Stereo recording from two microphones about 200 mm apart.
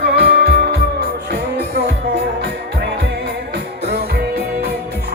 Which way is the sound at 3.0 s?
60° right (ahead or behind).